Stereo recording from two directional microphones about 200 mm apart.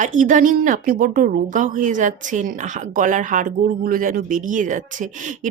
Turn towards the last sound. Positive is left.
turn(degrees=-40)  # may be behind; listen again after turning